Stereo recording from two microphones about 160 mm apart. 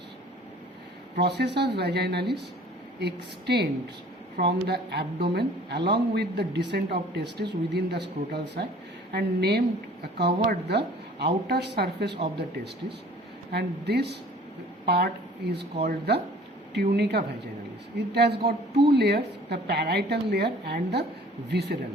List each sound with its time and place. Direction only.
1.2 s speech: 90° right
13.5 s speech: 90° right